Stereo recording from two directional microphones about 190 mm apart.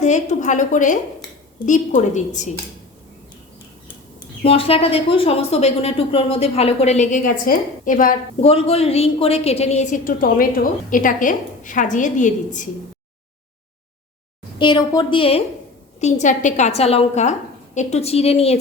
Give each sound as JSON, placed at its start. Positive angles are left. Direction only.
{"t": 0.0, "sound": "a woman's voice", "side_deg": 40}
{"t": 4.4, "sound": "a woman's voice", "side_deg": 30}
{"t": 8.4, "sound": "a woman's voice", "side_deg": 30}
{"t": 14.6, "sound": "a woman's voice", "side_deg": 25}